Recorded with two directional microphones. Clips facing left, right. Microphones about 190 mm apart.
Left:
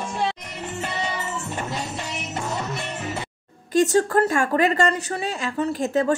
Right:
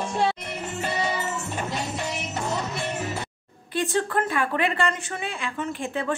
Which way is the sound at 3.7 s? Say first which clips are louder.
Left 7 dB; 40° left (ahead or behind).